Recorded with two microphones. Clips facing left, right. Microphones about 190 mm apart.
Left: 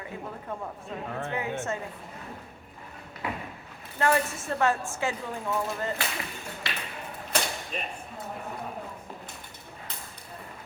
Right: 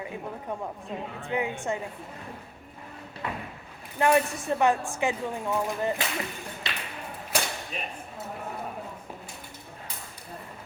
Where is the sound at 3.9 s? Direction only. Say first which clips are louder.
Right 3 dB; 15° right (ahead or behind).